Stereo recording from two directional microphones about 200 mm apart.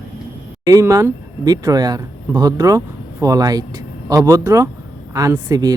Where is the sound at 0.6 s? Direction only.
15° right (ahead or behind).